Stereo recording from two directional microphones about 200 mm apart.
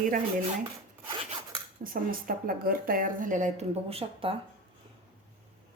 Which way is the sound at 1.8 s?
45° right (ahead or behind).